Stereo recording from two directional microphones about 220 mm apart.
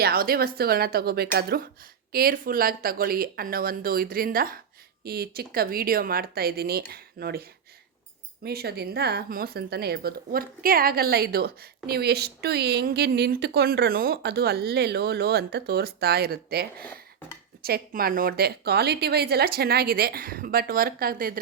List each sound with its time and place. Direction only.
0.0 s speech: 45° right (ahead or behind)
8.4 s speech: 45° right (ahead or behind)
16.8 s dishes: 5° left (ahead or behind)
17.6 s speech: 45° right (ahead or behind)